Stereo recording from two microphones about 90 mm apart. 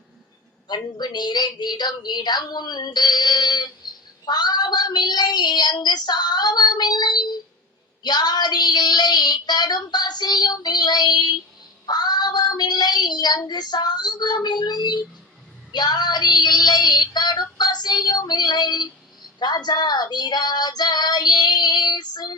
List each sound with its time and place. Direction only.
0.7 s a woman's voice: 50° left (ahead or behind)
11.9 s child singing: 50° left (ahead or behind)
13.5 s a woman's voice: 50° left (ahead or behind)
15.7 s child singing: 50° left (ahead or behind)
19.4 s a woman's voice: 50° left (ahead or behind)